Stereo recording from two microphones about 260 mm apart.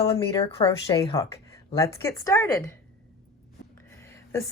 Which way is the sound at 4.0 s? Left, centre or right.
Centre.